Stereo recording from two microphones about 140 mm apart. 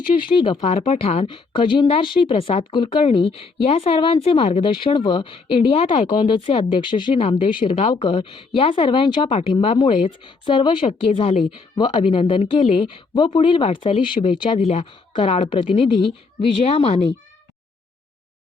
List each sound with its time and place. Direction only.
0.3 s speech: 35° left (ahead or behind)
0.6 s speech: 45° left (ahead or behind)
9.3 s a woman's voice: 45° left (ahead or behind)
9.7 s speech: 35° left (ahead or behind)
14.6 s a woman's voice: 45° left (ahead or behind)